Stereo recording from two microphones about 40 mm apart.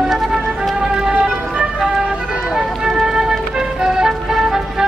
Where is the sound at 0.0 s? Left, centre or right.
Centre.